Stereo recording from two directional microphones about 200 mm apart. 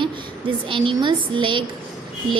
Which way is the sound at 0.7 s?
25° right (ahead or behind).